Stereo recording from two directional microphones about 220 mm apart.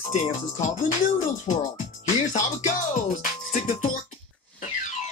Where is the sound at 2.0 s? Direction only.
35° left (ahead or behind).